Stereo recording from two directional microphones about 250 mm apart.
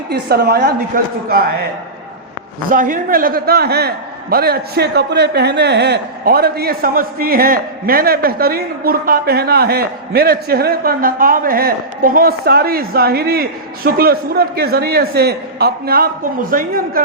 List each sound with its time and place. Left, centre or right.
0.1 s a man's voice: right
2.6 s a man's voice: right